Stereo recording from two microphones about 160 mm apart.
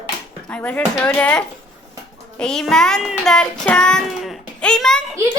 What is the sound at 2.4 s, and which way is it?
Child singing, 5° left (ahead or behind).